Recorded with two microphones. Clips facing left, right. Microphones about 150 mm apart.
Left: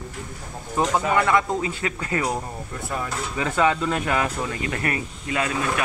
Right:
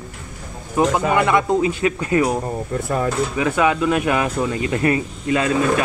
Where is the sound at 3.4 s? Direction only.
10° right (ahead or behind); by 5.6 s 25° right (ahead or behind).